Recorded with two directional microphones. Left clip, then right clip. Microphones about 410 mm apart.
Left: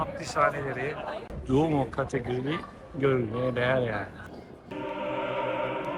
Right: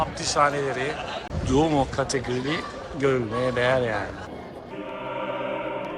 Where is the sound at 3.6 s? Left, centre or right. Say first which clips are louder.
Right 4 dB; centre.